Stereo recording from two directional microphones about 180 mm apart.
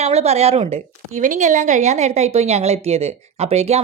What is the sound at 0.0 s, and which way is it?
Speech, 35° right (ahead or behind).